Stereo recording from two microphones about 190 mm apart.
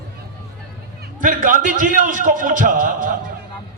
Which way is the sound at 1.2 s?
45° right (ahead or behind).